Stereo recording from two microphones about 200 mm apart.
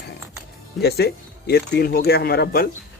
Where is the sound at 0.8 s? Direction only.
55° left (ahead or behind).